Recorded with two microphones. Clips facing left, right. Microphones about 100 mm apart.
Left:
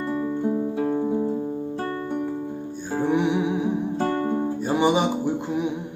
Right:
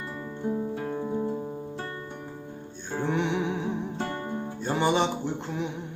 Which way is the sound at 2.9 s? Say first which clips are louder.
Left 5 dB; 10° left (ahead or behind).